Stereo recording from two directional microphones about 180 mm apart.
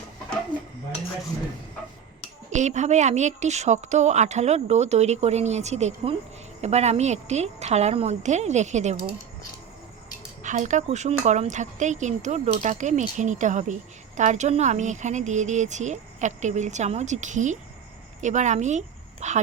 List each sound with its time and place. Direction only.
2.5 s speech: 40° right (ahead or behind)
10.4 s a woman's voice: 45° right (ahead or behind)